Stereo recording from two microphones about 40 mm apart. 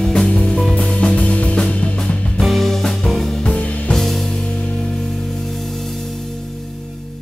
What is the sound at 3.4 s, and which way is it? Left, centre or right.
Music, left.